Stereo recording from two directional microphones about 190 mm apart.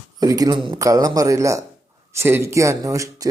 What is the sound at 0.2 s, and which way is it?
Speech, 20° right (ahead or behind).